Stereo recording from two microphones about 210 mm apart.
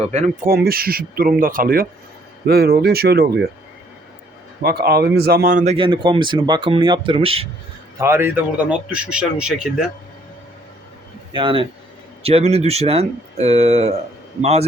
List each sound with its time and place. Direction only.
0.1 s speech: 35° right (ahead or behind)
0.5 s speech: 45° right (ahead or behind)
4.6 s speech: 50° right (ahead or behind)
5.7 s speech: 25° right (ahead or behind)
7.9 s speech: 10° right (ahead or behind)
11.3 s speech: 25° right (ahead or behind)